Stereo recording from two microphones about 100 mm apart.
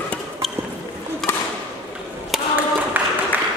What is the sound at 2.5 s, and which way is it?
Music, 15° right (ahead or behind).